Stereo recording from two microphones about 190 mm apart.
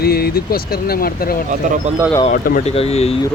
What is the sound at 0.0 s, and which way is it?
Speech, 55° left (ahead or behind).